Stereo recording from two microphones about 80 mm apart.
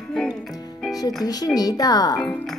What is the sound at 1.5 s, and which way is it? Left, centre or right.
Speech, left.